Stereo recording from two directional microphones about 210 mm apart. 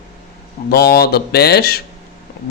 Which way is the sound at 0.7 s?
45° left (ahead or behind).